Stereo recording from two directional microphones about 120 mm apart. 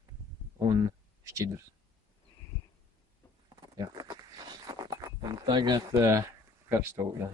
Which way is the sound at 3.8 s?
35° right (ahead or behind).